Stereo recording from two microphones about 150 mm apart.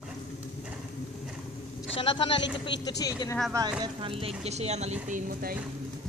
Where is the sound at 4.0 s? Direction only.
35° right (ahead or behind).